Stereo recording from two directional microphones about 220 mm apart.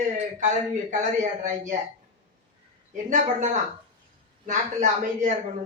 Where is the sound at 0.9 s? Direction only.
35° right (ahead or behind).